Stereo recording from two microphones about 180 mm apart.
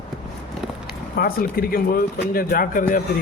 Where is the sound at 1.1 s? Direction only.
55° left (ahead or behind).